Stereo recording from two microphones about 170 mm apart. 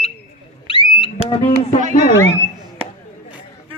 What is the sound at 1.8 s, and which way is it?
Music, 45° right (ahead or behind).